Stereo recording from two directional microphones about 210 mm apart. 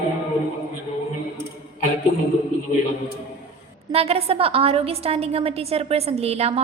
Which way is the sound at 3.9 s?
30° right (ahead or behind).